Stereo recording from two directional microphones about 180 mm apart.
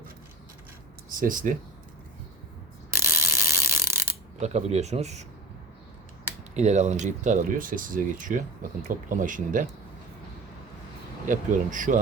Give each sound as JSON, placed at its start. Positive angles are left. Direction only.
{"t": 1.1, "sound": "speech", "side_deg": -50}
{"t": 2.9, "sound": "mechanisms", "side_deg": -15}
{"t": 4.4, "sound": "speech", "side_deg": -40}
{"t": 6.6, "sound": "speech", "side_deg": -40}
{"t": 11.3, "sound": "speech", "side_deg": -45}